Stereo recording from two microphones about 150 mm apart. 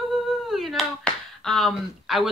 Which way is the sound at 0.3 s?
Centre (ahead or behind).